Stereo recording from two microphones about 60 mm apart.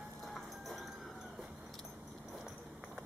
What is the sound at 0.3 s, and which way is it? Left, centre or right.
Clip-clop, centre.